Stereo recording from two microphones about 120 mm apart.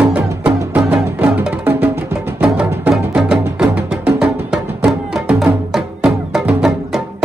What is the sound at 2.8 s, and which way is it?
Music, 5° right (ahead or behind).